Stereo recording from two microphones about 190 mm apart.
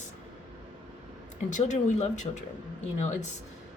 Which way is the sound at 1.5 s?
40° left (ahead or behind).